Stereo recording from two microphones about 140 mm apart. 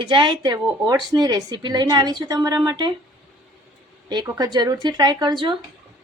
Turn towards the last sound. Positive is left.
turn(degrees=-35)  # may be behind; listen again after turning